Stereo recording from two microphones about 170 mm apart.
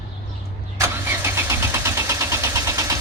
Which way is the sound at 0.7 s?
15° right (ahead or behind).